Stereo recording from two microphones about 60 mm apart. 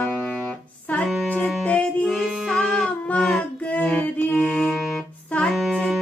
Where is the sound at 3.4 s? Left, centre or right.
Left.